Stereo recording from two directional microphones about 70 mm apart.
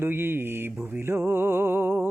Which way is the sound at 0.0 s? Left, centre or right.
Right.